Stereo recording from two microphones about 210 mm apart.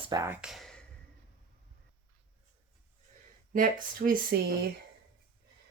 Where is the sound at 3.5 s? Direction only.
40° right (ahead or behind).